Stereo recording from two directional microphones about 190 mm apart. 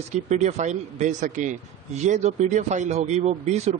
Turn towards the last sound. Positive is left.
turn(degrees=-35)  # may be behind; listen again after turning